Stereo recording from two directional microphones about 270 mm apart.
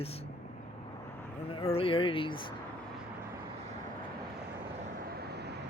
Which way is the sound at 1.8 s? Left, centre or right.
Centre.